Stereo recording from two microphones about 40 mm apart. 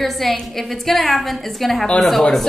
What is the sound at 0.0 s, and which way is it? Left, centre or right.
A woman's voice, centre.